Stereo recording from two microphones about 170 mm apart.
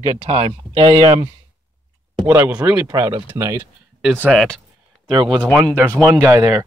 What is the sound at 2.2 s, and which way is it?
Speech, 15° right (ahead or behind).